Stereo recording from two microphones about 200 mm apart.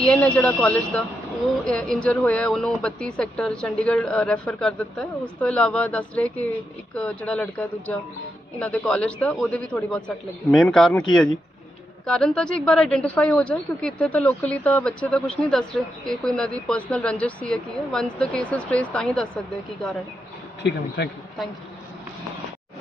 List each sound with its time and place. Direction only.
0.0 s speech: 5° left (ahead or behind)
12.0 s speech: 5° left (ahead or behind)
20.6 s speech: 55° left (ahead or behind)